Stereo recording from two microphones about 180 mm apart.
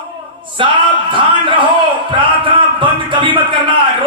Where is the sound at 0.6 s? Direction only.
30° right (ahead or behind).